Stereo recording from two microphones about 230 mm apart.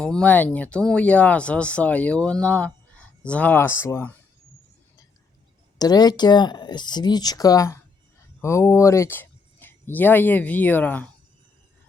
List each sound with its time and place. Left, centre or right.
0.0 s speech: centre
5.8 s speech: centre